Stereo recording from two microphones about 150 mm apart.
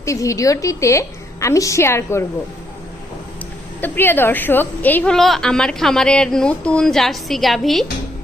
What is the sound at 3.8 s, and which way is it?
A woman's voice, 15° left (ahead or behind).